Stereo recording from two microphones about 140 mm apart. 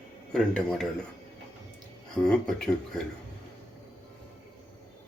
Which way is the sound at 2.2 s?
5° left (ahead or behind).